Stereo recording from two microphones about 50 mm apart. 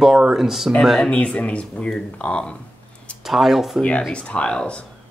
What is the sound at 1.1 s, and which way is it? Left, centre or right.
Speech, left.